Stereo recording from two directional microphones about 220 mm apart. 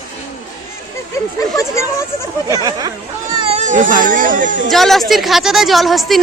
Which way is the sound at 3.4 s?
30° right (ahead or behind).